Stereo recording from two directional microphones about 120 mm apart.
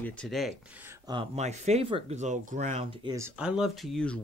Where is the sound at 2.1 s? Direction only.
80° right.